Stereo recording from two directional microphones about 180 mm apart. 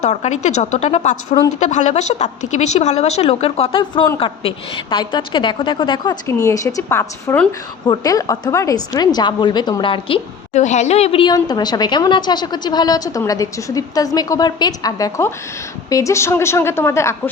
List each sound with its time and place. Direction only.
0.0 s speech: 40° left (ahead or behind)
10.5 s a woman's voice: 40° left (ahead or behind); by 17.2 s 15° left (ahead or behind)